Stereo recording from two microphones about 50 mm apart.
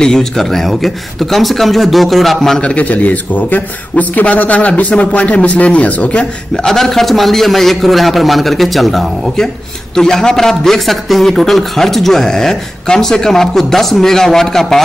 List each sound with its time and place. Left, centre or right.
0.0 s a man's voice: centre
2.6 s a man's voice: left
6.5 s a man's voice: centre